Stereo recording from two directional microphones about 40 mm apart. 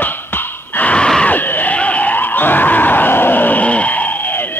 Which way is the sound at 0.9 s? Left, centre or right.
Left.